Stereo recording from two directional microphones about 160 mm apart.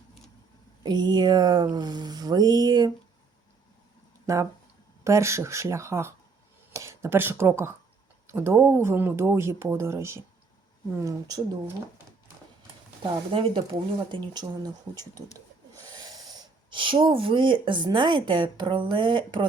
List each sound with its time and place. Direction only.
0.8 s speech: 25° right (ahead or behind)
5.0 s speech: 15° right (ahead or behind)
13.0 s speech: 30° right (ahead or behind)